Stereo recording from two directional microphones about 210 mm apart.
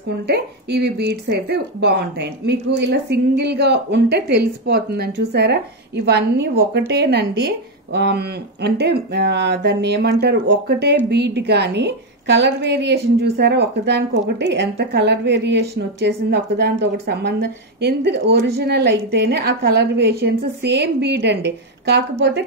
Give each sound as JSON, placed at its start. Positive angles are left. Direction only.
{"t": 0.3, "sound": "a woman's voice", "side_deg": -50}